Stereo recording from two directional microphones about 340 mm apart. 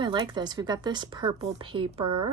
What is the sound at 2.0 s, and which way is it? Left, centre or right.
Speech, right.